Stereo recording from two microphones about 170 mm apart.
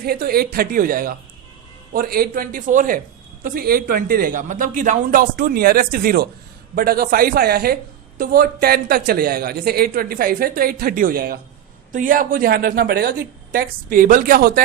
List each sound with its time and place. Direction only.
0.0 s speech: 60° right (ahead or behind)